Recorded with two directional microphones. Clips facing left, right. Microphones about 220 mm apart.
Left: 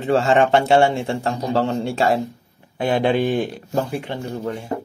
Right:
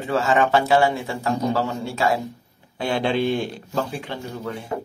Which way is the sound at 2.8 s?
20° left (ahead or behind).